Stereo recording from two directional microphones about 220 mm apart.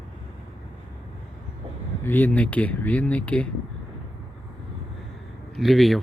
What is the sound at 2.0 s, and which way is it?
Speech, 10° left (ahead or behind).